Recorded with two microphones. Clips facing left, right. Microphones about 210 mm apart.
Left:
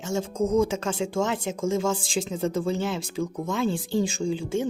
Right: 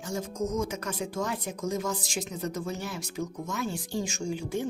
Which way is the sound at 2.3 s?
90° left.